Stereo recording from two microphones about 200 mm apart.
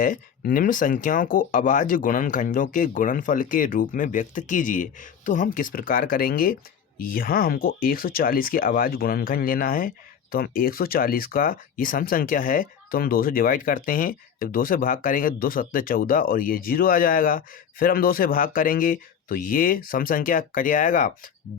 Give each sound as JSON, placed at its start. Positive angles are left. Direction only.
{"t": 0.0, "sound": "speech", "side_deg": 45}